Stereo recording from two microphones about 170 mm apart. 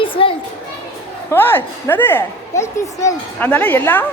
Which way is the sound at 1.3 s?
15° left (ahead or behind).